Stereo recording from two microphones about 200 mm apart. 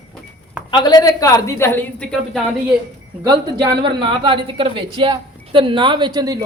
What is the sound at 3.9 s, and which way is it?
A woman's voice, 25° right (ahead or behind).